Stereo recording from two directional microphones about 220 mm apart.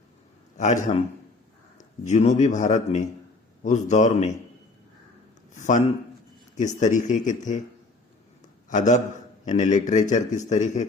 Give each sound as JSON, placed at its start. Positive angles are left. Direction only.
{"t": 0.5, "sound": "a man's voice", "side_deg": 35}
{"t": 1.8, "sound": "speech", "side_deg": 35}
{"t": 5.5, "sound": "speech", "side_deg": 35}
{"t": 8.7, "sound": "a man's voice", "side_deg": 35}